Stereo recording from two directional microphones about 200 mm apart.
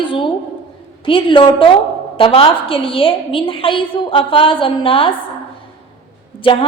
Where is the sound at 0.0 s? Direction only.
25° left (ahead or behind).